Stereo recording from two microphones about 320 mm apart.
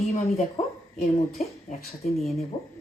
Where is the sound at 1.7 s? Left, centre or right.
Left.